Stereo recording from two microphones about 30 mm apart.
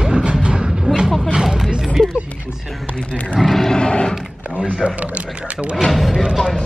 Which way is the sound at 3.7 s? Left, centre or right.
Left.